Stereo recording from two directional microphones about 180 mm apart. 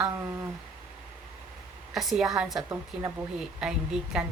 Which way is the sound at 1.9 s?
Centre (ahead or behind).